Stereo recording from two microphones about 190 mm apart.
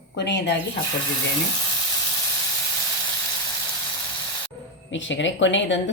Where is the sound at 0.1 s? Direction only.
70° left (ahead or behind).